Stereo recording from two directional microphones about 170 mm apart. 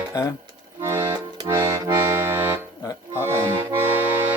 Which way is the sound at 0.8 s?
15° right (ahead or behind).